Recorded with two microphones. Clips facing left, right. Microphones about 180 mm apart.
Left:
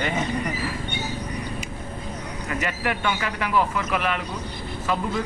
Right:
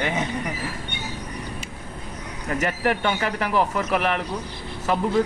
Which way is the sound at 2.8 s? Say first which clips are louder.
Right 3 dB; 40° right (ahead or behind).